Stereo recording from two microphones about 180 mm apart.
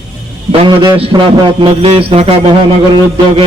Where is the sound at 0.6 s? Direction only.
30° right (ahead or behind).